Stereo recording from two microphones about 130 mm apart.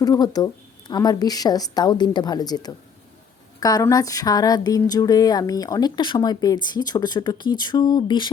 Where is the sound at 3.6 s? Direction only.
25° left (ahead or behind).